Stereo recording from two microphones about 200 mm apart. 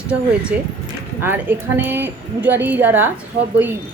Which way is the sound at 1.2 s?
10° right (ahead or behind).